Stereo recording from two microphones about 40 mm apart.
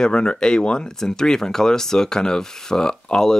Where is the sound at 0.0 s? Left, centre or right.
Left.